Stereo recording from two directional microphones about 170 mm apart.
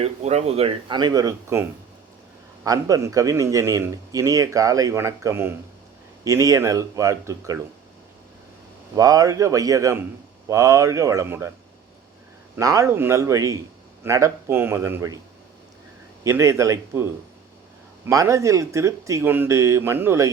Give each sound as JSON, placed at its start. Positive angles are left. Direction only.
{"t": 0.0, "sound": "a man's voice", "side_deg": -40}
{"t": 2.6, "sound": "a man's voice", "side_deg": -20}
{"t": 9.0, "sound": "a man's voice", "side_deg": -20}
{"t": 12.5, "sound": "a man's voice", "side_deg": -20}
{"t": 16.2, "sound": "speech", "side_deg": -15}
{"t": 18.1, "sound": "speech", "side_deg": -20}